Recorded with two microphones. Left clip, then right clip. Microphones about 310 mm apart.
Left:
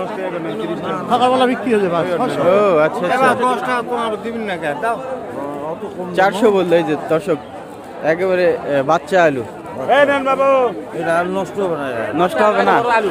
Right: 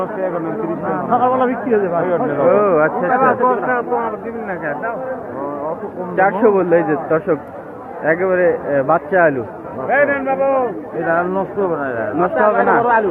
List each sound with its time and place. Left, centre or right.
1.1 s speech: left
2.5 s a man's voice: left
3.2 s speech: left
6.1 s a man's voice: left
9.9 s a man's voice: left
12.8 s speech: centre